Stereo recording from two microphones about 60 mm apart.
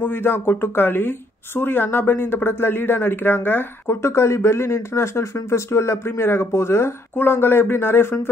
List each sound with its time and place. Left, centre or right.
0.0 s speech: left
3.9 s speech: left